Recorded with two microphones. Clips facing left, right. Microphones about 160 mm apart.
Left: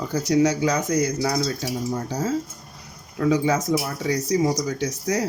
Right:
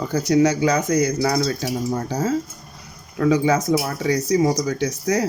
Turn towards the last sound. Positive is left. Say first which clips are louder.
# right 3 dB
turn(degrees=-65)  # may be behind; listen again after turning